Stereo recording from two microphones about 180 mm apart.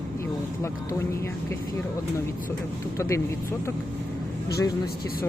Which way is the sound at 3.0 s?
15° left (ahead or behind).